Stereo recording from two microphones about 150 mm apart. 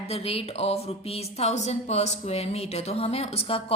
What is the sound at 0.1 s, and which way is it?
Speech, 40° left (ahead or behind).